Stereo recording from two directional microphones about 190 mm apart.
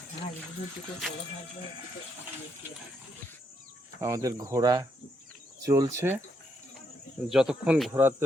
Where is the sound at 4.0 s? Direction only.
15° right (ahead or behind).